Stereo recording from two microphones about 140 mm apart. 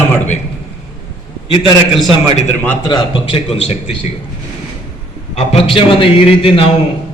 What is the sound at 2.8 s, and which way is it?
A man's voice, 35° left (ahead or behind).